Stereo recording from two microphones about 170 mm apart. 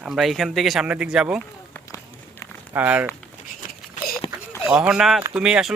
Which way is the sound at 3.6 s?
50° left (ahead or behind).